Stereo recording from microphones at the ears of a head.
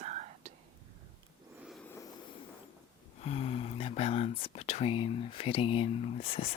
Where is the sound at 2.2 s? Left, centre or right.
Left.